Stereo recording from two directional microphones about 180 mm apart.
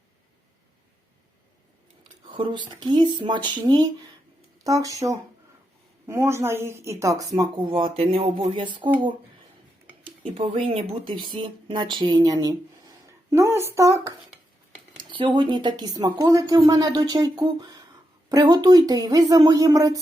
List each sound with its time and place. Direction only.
2.2 s a woman's voice: 25° right (ahead or behind)
10.0 s a woman's voice: 30° right (ahead or behind)